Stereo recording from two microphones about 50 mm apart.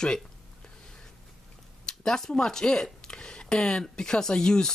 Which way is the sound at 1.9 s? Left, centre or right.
Centre.